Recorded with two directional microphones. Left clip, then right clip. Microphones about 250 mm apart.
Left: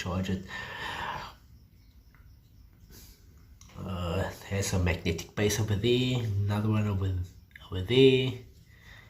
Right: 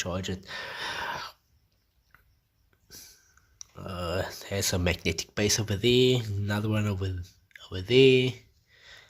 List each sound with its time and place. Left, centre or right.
0.0 s speech: right
3.8 s speech: right
8.8 s sniff: right